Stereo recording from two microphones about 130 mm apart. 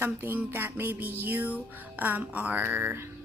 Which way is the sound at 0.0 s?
15° right (ahead or behind).